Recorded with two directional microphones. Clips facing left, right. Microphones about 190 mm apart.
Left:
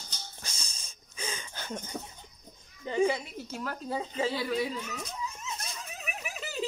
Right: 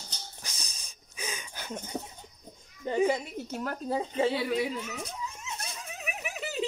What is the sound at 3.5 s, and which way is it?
Speech, 45° right (ahead or behind).